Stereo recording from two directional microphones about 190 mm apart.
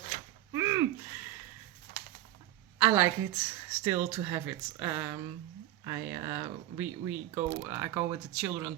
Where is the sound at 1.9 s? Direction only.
45° right (ahead or behind).